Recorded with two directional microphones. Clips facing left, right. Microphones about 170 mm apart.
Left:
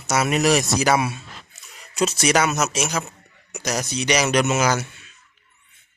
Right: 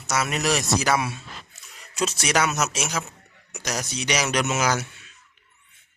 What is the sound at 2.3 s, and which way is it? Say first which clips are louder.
Speech: left 3 dB; 5° left (ahead or behind).